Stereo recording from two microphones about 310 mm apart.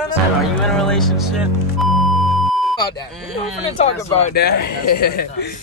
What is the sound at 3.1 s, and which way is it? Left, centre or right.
Speech, centre.